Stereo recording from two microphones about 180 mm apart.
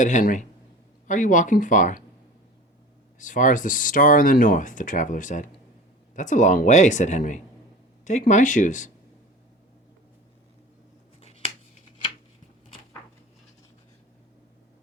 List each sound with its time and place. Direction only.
0.0 s speech: 45° left (ahead or behind)
3.2 s speech: 45° left (ahead or behind)
11.2 s finger snapping: 35° left (ahead or behind)